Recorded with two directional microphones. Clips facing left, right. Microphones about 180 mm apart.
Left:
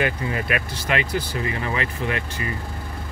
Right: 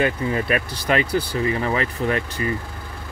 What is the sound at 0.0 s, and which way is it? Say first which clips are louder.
Speech: right 3 dB; 30° right (ahead or behind).